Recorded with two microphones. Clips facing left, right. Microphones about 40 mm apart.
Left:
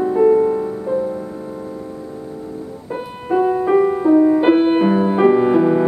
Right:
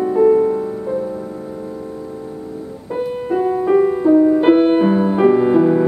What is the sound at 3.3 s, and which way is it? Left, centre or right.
Music, centre.